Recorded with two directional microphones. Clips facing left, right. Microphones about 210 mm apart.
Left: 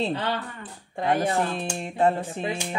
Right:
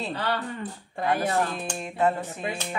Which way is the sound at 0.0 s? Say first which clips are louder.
Left 2 dB; 20° left (ahead or behind).